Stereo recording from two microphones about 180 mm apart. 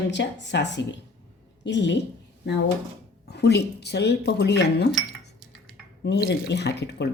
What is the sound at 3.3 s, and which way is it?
Speech, 70° left (ahead or behind).